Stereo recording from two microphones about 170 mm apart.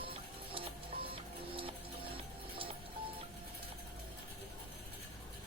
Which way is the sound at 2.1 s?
30° right (ahead or behind).